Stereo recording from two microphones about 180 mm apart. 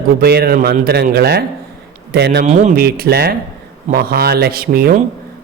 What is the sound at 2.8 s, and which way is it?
A man's voice, 60° right (ahead or behind).